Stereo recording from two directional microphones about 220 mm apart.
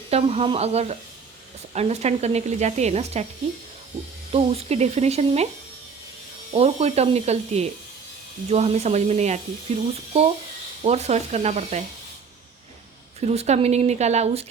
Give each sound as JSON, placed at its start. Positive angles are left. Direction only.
{"t": 0.1, "sound": "speech", "side_deg": -25}
{"t": 4.3, "sound": "speech", "side_deg": -25}
{"t": 6.5, "sound": "speech", "side_deg": -30}
{"t": 13.1, "sound": "speech", "side_deg": -30}